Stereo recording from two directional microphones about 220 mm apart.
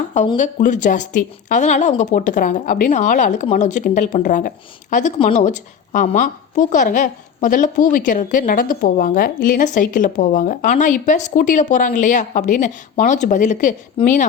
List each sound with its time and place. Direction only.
0.3 s a woman's voice: 35° left (ahead or behind)